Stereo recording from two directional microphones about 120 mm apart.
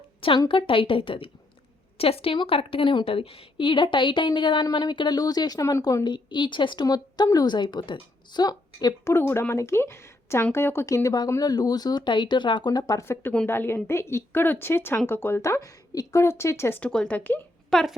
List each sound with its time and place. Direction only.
0.2 s a woman's voice: 45° left (ahead or behind); by 17.4 s 15° left (ahead or behind)
17.7 s speech: centre (ahead or behind)